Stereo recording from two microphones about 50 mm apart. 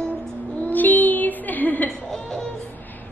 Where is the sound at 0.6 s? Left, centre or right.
Left.